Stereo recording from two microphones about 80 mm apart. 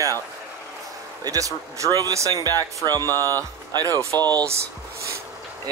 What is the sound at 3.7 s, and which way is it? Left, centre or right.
Speech, right.